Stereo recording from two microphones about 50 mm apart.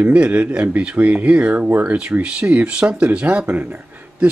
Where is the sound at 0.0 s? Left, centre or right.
Right.